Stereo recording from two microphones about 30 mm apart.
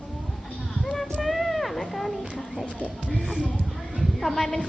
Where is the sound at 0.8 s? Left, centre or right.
Centre.